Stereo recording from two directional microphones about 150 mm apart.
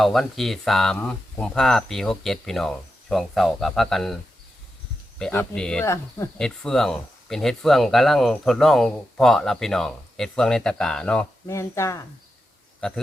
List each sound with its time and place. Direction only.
0.0 s speech: centre (ahead or behind)
5.3 s speech: 10° left (ahead or behind)
5.8 s speech: 20° left (ahead or behind)
6.4 s speech: 5° left (ahead or behind)
11.4 s speech: 20° left (ahead or behind)